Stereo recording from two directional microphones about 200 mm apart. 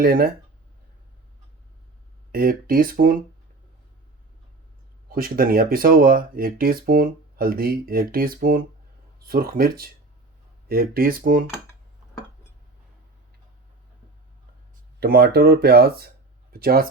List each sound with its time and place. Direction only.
0.0 s speech: 50° right (ahead or behind)
2.3 s speech: 45° right (ahead or behind)
5.0 s speech: 45° right (ahead or behind)
15.0 s speech: 50° right (ahead or behind)